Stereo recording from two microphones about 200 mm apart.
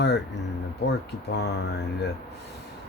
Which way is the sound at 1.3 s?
55° left (ahead or behind).